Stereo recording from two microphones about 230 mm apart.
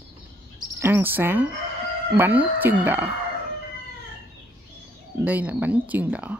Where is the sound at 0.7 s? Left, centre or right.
Centre.